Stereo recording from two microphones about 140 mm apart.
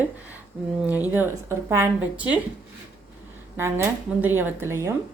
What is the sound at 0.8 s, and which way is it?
Speech, 10° right (ahead or behind).